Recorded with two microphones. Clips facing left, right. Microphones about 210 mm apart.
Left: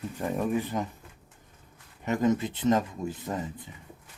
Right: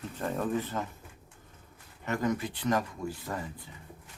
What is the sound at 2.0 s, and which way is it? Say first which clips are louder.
Speech: left 5 dB; 20° left (ahead or behind).